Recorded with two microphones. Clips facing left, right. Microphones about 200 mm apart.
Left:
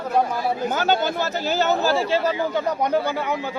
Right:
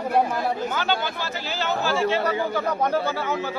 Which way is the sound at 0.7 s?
45° left (ahead or behind).